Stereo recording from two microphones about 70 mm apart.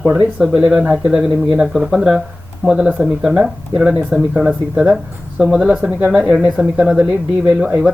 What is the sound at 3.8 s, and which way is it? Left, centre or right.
Speech, centre.